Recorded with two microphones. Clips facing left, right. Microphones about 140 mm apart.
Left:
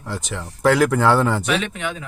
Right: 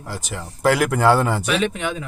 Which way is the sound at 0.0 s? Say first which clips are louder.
Left 2 dB; 5° right (ahead or behind).